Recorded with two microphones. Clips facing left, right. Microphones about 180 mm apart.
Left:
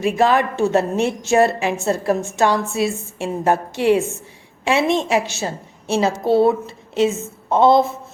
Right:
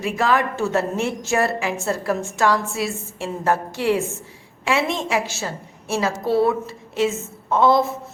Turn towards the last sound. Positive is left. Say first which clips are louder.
# left 3 dB
turn(degrees=25)  # may be behind; listen again after turning